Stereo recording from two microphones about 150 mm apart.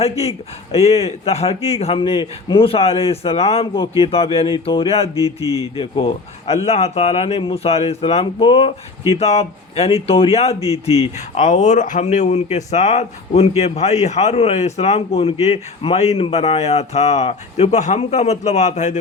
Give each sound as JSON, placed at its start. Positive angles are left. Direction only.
{"t": 0.0, "sound": "a man's voice", "side_deg": 45}